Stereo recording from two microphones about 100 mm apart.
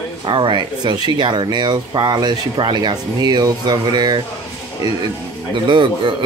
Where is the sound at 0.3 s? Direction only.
55° right (ahead or behind).